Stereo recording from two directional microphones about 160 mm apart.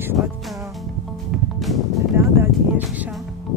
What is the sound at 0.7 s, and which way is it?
Music, centre (ahead or behind).